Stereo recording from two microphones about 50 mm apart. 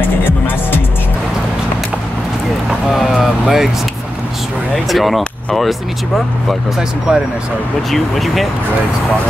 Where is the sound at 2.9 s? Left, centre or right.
Centre.